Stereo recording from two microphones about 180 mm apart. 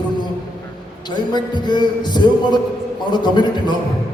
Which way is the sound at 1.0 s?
25° left (ahead or behind).